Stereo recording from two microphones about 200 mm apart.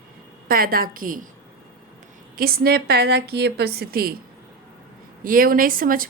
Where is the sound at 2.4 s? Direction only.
45° right (ahead or behind).